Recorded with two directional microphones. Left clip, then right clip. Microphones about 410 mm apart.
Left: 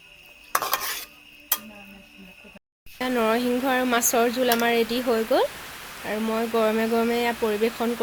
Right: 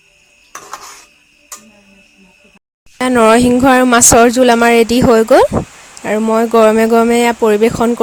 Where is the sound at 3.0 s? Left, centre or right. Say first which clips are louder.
Right 14 dB; right.